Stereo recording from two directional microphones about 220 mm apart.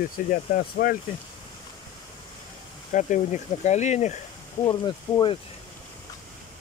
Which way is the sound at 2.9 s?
35° left (ahead or behind).